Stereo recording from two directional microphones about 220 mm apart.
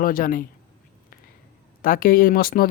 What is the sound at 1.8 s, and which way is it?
Speech, 40° left (ahead or behind).